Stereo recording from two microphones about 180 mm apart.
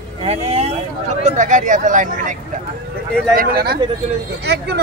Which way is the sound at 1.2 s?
45° right (ahead or behind).